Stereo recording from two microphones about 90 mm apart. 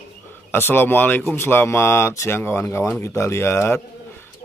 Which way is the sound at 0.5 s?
25° left (ahead or behind).